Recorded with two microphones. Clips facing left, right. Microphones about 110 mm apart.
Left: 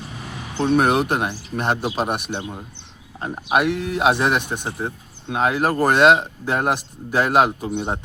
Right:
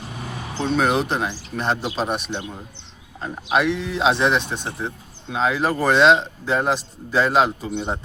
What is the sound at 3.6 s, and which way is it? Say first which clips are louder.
Speech: left 1 dB; 55° left (ahead or behind).